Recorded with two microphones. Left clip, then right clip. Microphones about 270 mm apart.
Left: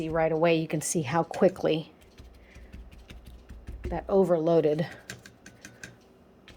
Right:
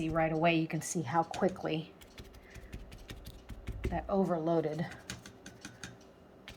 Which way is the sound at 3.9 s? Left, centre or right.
Left.